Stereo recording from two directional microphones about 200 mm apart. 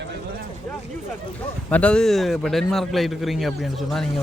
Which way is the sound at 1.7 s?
5° left (ahead or behind).